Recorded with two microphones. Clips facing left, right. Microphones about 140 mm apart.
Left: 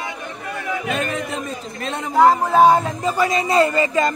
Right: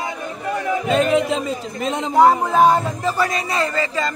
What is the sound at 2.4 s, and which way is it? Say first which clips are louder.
Speech: left 1 dB; 10° left (ahead or behind).